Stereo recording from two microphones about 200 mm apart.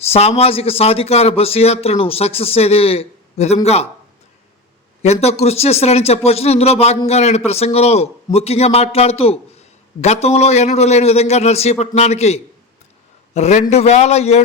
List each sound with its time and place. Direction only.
0.0 s a man's voice: 30° left (ahead or behind)
5.0 s a man's voice: 35° left (ahead or behind)